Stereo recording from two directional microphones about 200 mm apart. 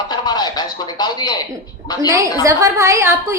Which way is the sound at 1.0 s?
20° left (ahead or behind).